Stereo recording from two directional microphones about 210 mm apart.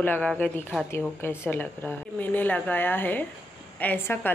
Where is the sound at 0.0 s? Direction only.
5° left (ahead or behind).